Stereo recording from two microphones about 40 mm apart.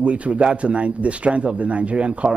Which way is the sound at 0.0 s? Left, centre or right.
Right.